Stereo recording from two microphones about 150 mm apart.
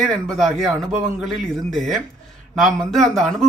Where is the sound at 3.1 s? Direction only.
Centre (ahead or behind).